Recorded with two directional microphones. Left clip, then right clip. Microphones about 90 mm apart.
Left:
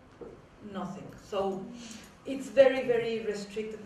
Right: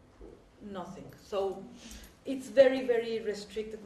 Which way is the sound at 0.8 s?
35° left (ahead or behind).